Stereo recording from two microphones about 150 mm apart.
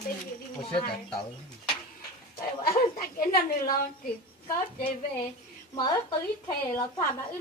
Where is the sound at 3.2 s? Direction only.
70° left (ahead or behind).